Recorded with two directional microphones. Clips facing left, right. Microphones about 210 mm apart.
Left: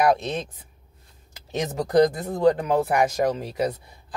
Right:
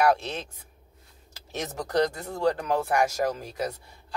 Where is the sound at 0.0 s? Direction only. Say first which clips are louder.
Left 2 dB; 15° left (ahead or behind).